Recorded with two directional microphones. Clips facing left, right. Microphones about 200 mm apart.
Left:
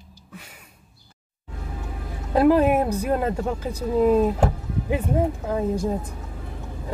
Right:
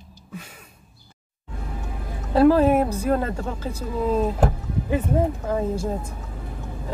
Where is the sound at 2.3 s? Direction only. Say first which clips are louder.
Right 1 dB; 15° left (ahead or behind).